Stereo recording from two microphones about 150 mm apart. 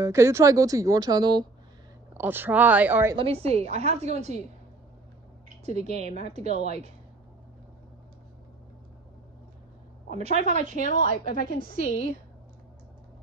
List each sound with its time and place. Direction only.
0.0 s speech: 20° right (ahead or behind)
2.1 s speech: 15° right (ahead or behind)
3.2 s a woman's voice: 40° right (ahead or behind)
5.7 s a woman's voice: 45° right (ahead or behind)
10.0 s a woman's voice: 45° right (ahead or behind)
10.8 s a woman's voice: 55° left (ahead or behind)
11.5 s a woman's voice: 70° right (ahead or behind)